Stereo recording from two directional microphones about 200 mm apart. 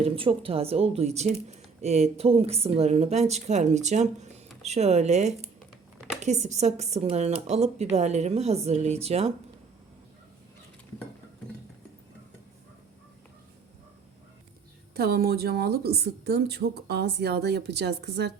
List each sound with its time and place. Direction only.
0.0 s speech: 25° right (ahead or behind)
14.9 s a woman's voice: 50° right (ahead or behind)